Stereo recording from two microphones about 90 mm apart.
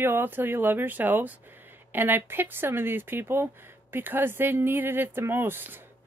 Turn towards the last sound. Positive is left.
turn(degrees=-20)  # may be behind; listen again after turning